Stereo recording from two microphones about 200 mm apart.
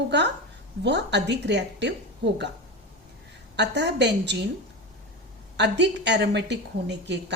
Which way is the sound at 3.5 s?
60° right (ahead or behind).